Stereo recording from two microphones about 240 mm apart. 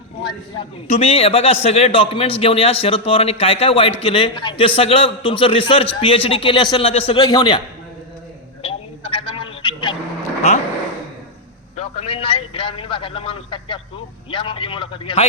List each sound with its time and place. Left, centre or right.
0.9 s a man's voice: left
8.6 s a sound: left
11.8 s a man's voice: left